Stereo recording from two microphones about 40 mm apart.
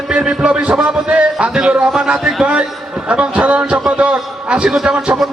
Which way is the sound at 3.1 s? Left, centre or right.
Right.